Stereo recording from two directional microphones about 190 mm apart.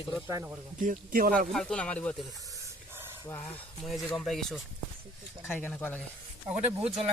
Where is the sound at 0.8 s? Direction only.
45° right (ahead or behind).